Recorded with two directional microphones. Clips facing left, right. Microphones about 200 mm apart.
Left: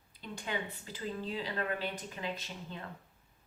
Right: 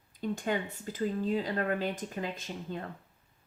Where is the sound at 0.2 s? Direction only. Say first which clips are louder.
Right 7 dB; 45° right (ahead or behind).